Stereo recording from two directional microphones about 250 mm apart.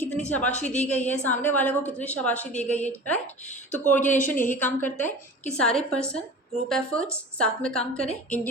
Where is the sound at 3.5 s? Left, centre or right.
Left.